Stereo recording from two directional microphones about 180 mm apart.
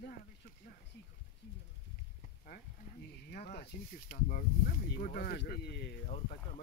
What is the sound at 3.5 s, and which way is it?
Speech, 55° left (ahead or behind).